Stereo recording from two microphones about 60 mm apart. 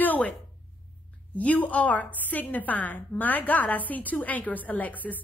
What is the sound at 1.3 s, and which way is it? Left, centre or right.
A woman's voice, left.